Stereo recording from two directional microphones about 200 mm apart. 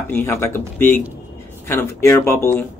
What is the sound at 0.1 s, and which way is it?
Speech, 10° left (ahead or behind).